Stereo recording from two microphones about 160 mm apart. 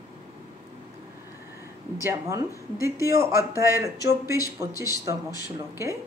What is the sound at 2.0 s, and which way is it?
A woman's voice, 15° right (ahead or behind).